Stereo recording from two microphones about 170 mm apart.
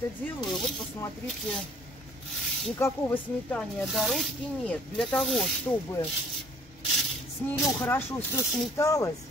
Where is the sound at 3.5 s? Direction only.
Centre (ahead or behind).